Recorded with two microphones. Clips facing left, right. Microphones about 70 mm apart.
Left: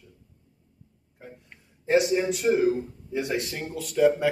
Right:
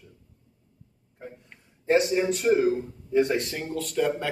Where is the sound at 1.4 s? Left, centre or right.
Centre.